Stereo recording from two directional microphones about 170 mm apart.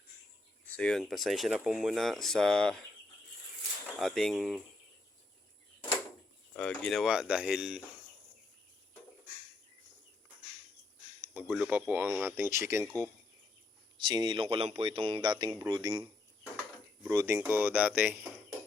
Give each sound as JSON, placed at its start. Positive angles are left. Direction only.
{"t": 0.8, "sound": "speech", "side_deg": 5}
{"t": 3.9, "sound": "speech", "side_deg": 0}
{"t": 6.5, "sound": "speech", "side_deg": 5}
{"t": 11.2, "sound": "a sound", "side_deg": -10}
{"t": 11.5, "sound": "speech", "side_deg": -5}
{"t": 14.0, "sound": "speech", "side_deg": -25}